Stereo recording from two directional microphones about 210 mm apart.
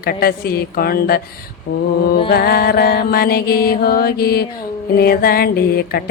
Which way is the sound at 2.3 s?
45° left (ahead or behind).